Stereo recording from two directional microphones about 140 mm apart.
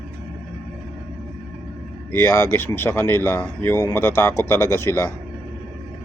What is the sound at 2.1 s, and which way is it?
Speech, 20° left (ahead or behind).